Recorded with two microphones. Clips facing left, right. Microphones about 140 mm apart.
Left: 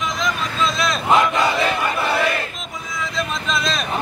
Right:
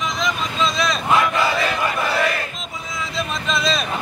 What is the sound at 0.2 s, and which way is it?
Vehicle, centre (ahead or behind).